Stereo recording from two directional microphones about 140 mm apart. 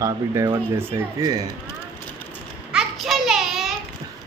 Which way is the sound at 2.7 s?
Centre (ahead or behind).